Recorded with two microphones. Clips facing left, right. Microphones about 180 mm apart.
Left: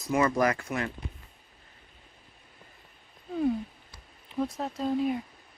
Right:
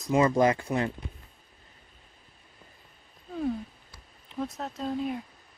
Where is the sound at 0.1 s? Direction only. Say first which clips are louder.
Right 3 dB; 25° right (ahead or behind).